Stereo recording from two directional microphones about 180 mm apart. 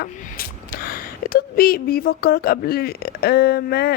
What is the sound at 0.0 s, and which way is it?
Speech, 55° left (ahead or behind).